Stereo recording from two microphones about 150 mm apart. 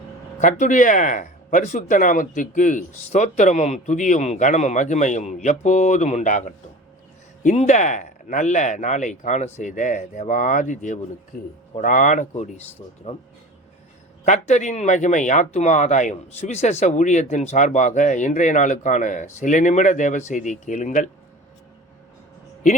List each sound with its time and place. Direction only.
0.3 s speech: 55° left (ahead or behind)
12.3 s speech: 50° left (ahead or behind)
14.3 s speech: 50° left (ahead or behind)